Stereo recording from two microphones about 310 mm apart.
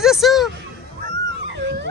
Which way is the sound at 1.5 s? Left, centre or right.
Right.